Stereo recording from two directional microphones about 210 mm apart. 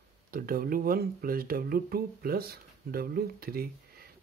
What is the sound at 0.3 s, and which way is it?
Speech, 45° right (ahead or behind).